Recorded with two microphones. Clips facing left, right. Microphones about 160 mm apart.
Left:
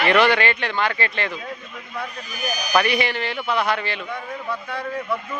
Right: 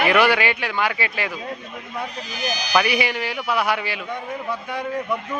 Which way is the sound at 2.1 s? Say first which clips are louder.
Right 1 dB; 90° right.